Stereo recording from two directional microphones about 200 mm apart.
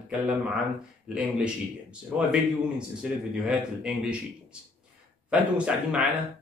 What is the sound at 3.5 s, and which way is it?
Speech, 5° right (ahead or behind).